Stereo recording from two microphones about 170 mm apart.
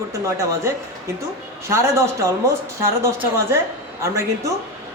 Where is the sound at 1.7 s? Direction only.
15° right (ahead or behind).